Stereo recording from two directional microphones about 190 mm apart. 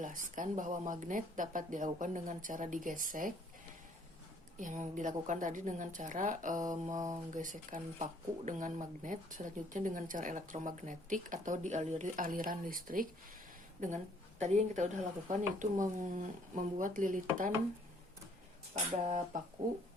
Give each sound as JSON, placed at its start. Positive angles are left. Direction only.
{"t": 0.0, "sound": "speech", "side_deg": -45}
{"t": 4.5, "sound": "speech", "side_deg": -40}
{"t": 6.9, "sound": "speech", "side_deg": -20}
{"t": 7.3, "sound": "a woman's voice", "side_deg": -45}
{"t": 18.7, "sound": "speech", "side_deg": -30}